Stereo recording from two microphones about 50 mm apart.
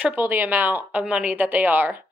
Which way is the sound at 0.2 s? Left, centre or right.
Right.